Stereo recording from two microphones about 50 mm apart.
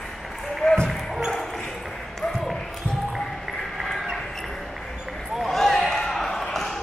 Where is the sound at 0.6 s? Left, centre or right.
Centre.